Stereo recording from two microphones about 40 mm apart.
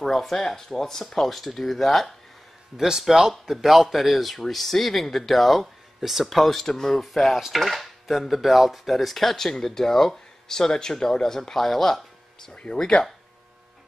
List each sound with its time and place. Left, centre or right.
0.0 s speech: centre
2.8 s speech: centre
6.6 s speech: centre
7.0 s speech: centre
12.7 s speech: centre